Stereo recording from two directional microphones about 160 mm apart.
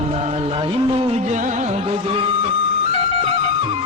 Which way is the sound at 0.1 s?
40° right (ahead or behind).